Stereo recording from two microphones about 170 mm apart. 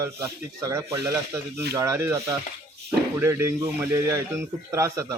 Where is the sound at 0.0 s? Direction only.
15° right (ahead or behind).